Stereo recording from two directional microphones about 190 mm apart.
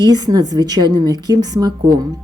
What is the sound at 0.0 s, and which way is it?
A woman's voice, 20° right (ahead or behind).